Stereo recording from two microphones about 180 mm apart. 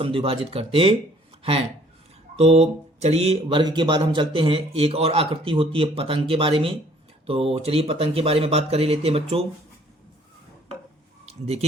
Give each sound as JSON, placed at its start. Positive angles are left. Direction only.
{"t": 0.0, "sound": "speech", "side_deg": -30}
{"t": 11.3, "sound": "speech", "side_deg": -35}